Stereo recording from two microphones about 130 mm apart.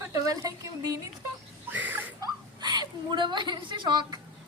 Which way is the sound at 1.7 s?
15° right (ahead or behind).